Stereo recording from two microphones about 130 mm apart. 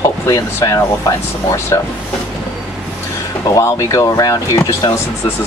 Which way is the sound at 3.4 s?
25° left (ahead or behind).